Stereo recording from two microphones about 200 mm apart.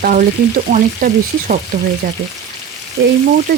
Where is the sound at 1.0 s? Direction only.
45° right (ahead or behind).